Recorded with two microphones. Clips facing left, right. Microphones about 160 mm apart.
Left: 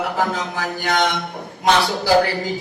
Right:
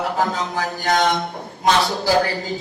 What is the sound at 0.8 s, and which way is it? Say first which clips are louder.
Speech: right 2 dB; 45° right (ahead or behind).